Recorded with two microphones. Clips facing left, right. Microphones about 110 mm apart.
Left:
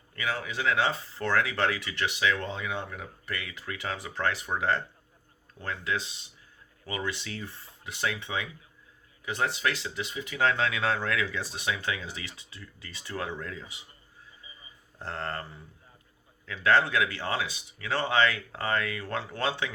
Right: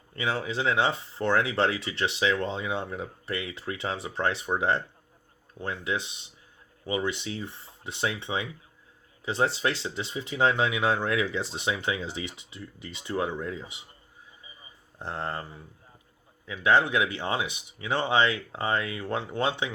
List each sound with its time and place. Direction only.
0.2 s speech: 25° right (ahead or behind)
14.9 s speech: 15° right (ahead or behind)
16.5 s speech: 15° right (ahead or behind)